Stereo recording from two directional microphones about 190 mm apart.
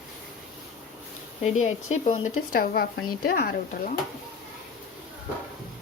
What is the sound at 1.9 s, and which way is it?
Speech, 40° left (ahead or behind).